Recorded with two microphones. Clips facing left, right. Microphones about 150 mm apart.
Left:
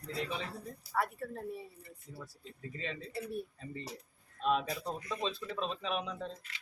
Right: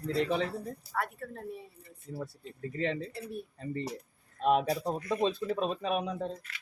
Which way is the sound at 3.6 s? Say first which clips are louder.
Right 8 dB; 55° right (ahead or behind).